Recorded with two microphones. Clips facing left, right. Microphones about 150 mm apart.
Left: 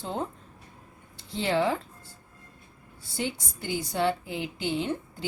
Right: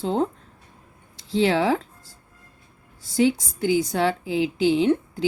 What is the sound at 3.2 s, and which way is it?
A woman's voice, 90° right.